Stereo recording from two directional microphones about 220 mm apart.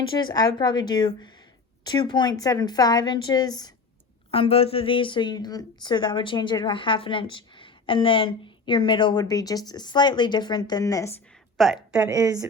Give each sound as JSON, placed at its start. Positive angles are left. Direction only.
{"t": 0.1, "sound": "a woman's voice", "side_deg": 15}
{"t": 11.5, "sound": "a woman's voice", "side_deg": 0}